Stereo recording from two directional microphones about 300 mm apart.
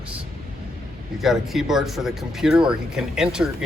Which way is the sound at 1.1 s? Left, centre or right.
Centre.